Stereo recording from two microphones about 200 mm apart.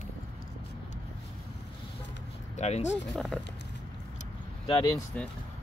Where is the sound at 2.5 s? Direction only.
35° left (ahead or behind).